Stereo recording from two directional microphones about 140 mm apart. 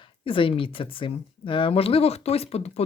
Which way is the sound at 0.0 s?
40° left (ahead or behind).